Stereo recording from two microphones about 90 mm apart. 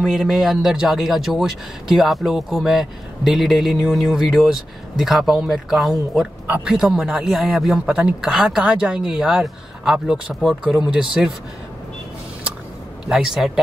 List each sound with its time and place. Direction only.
0.0 s speech: centre (ahead or behind)
13.0 s speech: 5° right (ahead or behind)